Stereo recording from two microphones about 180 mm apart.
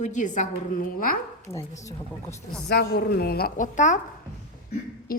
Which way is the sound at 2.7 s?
60° left (ahead or behind).